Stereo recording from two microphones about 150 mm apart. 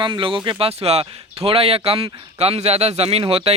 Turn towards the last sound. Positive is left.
turn(degrees=-40)  # may be behind; listen again after turning